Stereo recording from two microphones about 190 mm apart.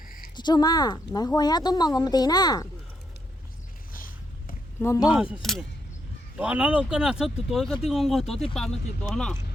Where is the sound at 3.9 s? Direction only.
45° left (ahead or behind).